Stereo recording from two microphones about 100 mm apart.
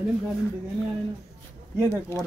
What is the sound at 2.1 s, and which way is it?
Speech, 30° left (ahead or behind).